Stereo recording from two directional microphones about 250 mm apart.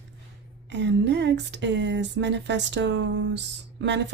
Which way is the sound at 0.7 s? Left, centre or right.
Right.